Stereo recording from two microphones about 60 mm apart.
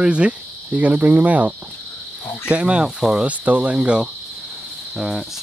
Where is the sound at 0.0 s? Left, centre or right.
Centre.